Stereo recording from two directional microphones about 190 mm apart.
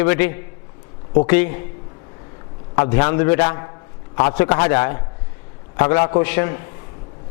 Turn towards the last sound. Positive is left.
turn(degrees=15)  # may be behind; listen again after turning